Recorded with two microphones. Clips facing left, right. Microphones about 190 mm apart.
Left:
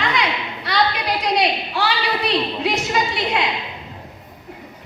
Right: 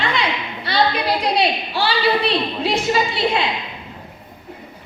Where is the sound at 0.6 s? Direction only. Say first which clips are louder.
Right 2 dB; 30° right (ahead or behind).